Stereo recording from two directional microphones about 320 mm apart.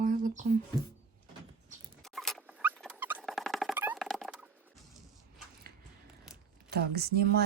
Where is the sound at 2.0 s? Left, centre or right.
Centre.